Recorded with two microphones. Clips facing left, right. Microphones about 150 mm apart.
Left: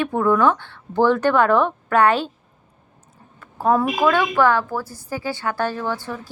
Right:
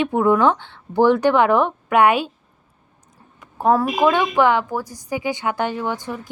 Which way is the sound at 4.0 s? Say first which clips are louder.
Right 1 dB; 20° right (ahead or behind).